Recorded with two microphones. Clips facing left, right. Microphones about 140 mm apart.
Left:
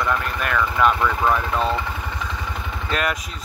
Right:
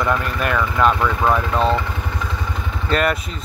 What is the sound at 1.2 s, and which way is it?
Speech, 30° right (ahead or behind).